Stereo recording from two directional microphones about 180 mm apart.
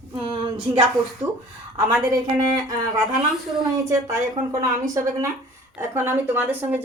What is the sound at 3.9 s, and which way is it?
Speech, 15° right (ahead or behind).